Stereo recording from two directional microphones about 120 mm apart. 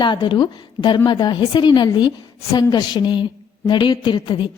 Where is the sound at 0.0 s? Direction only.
40° left (ahead or behind).